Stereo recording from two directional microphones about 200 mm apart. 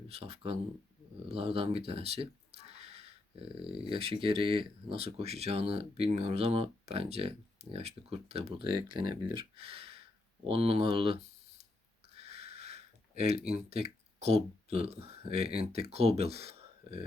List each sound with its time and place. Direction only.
0.1 s speech: 30° right (ahead or behind)
1.3 s a sound: 30° right (ahead or behind)
3.8 s speech: 25° right (ahead or behind)